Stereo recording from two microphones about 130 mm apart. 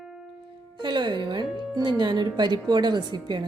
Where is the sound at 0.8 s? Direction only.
35° right (ahead or behind).